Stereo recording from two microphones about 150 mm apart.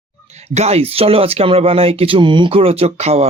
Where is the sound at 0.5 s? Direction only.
45° right (ahead or behind).